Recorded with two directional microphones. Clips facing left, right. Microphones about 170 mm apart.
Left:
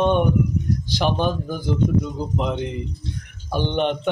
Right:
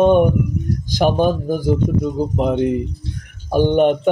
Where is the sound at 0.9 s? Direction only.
45° right (ahead or behind).